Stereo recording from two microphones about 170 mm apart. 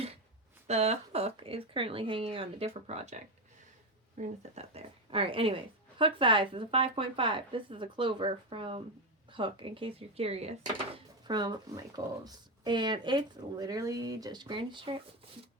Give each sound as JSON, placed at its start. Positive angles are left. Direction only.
{"t": 0.7, "sound": "a woman's voice", "side_deg": -40}
{"t": 10.9, "sound": "speech", "side_deg": -25}